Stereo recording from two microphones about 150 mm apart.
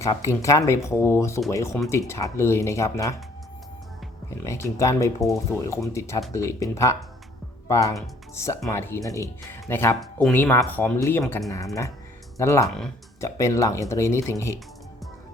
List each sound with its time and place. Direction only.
0.2 s speech: 20° left (ahead or behind)
4.4 s speech: 20° left (ahead or behind)
10.0 s speech: centre (ahead or behind)
10.3 s speech: 15° left (ahead or behind)